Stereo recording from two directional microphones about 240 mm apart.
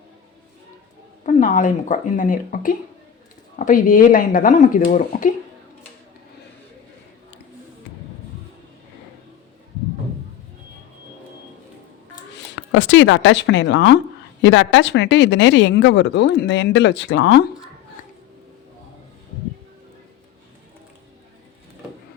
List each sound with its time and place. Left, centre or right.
1.2 s speech: left
12.7 s speech: left